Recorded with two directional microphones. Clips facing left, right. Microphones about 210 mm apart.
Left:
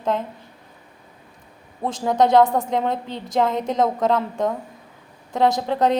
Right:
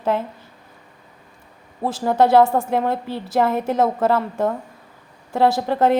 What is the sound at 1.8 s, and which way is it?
A woman's voice, 5° right (ahead or behind).